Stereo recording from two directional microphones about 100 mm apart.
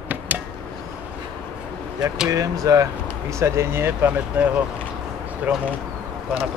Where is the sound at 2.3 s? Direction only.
35° right (ahead or behind); by 4.6 s 15° right (ahead or behind).